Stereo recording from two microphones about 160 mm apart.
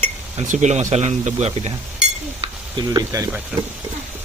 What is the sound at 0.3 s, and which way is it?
Speech, 50° right (ahead or behind).